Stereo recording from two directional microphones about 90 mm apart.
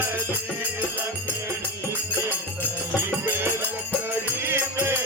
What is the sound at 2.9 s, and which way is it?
Music, 25° right (ahead or behind).